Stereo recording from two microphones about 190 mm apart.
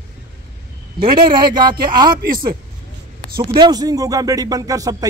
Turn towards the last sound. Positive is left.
turn(degrees=-20)  # may be behind; listen again after turning